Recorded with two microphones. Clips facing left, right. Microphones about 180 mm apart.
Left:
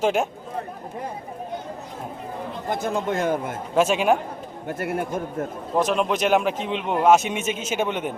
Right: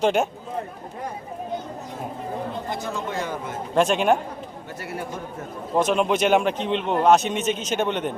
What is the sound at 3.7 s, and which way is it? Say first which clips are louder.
Speech: even; 5° left (ahead or behind).